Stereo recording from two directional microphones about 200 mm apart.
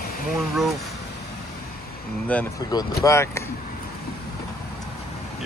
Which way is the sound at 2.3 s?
5° left (ahead or behind).